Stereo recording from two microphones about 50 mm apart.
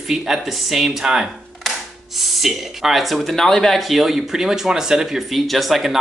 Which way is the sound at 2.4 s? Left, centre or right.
Centre.